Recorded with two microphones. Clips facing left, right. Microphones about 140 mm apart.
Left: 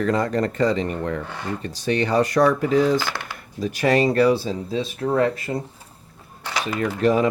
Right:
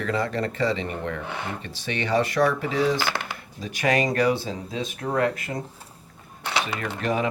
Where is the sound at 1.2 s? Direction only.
65° right (ahead or behind).